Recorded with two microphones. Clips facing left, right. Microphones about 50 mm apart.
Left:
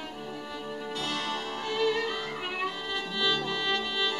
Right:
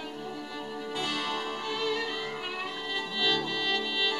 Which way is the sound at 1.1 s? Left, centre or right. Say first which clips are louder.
Left 1 dB; centre.